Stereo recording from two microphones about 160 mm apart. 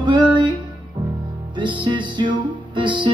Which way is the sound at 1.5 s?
30° right (ahead or behind).